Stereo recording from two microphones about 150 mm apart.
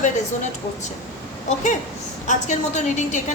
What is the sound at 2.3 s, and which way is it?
A woman's voice, 50° left (ahead or behind).